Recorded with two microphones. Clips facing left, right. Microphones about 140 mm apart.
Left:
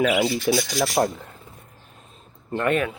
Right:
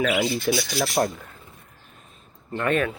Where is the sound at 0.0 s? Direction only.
15° left (ahead or behind).